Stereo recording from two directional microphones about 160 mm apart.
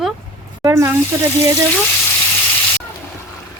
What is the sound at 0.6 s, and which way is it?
Speech, 15° right (ahead or behind).